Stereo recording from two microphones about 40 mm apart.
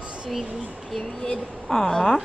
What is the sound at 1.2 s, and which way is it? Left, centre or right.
Speech, centre.